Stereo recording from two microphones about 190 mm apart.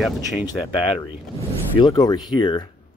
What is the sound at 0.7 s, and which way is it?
Speech, 25° left (ahead or behind).